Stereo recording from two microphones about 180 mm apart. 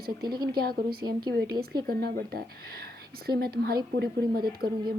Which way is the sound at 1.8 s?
60° right (ahead or behind).